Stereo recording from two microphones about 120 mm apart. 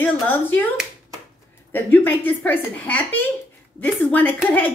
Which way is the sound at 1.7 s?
15° left (ahead or behind).